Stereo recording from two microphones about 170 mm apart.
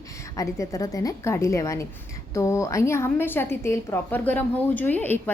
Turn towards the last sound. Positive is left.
turn(degrees=10)  # may be behind; listen again after turning